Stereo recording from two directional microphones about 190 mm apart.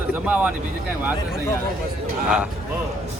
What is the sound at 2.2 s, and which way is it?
Speech, 5° right (ahead or behind).